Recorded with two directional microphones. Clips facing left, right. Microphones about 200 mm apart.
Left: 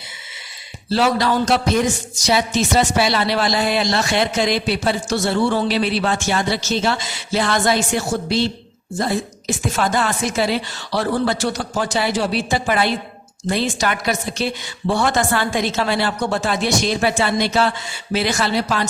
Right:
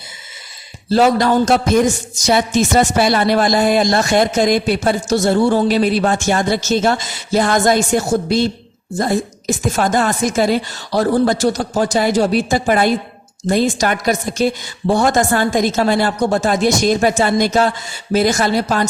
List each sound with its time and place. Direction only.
0.9 s speech: 45° right (ahead or behind)